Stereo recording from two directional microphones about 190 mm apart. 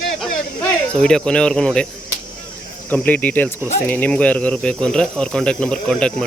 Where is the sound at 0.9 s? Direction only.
5° left (ahead or behind).